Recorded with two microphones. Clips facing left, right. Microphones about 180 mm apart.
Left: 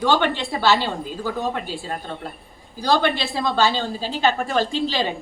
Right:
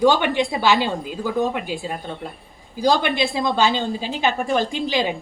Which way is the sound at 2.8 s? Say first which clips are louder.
Right 1 dB; 15° right (ahead or behind).